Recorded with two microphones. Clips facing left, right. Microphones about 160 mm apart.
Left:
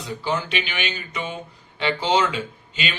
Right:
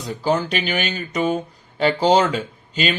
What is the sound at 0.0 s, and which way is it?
Speech, 40° right (ahead or behind).